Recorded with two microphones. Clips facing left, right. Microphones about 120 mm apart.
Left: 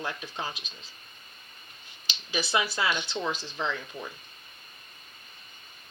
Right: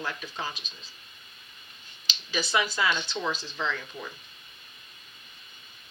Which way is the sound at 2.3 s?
20° left (ahead or behind).